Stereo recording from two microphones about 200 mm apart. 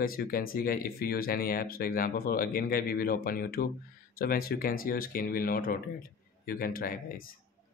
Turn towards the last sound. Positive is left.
turn(degrees=45)  # may be behind; listen again after turning